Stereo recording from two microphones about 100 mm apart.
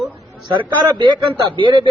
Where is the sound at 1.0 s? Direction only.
55° right (ahead or behind).